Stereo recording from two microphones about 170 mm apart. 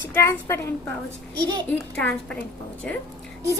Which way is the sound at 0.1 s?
15° left (ahead or behind).